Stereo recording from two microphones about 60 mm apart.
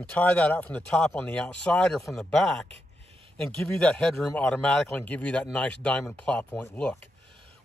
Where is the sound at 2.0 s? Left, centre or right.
Centre; by 6.6 s left.